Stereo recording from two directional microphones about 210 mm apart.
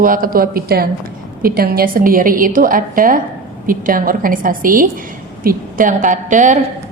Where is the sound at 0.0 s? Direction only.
40° right (ahead or behind).